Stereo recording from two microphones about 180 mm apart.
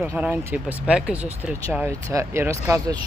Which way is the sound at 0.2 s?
10° right (ahead or behind).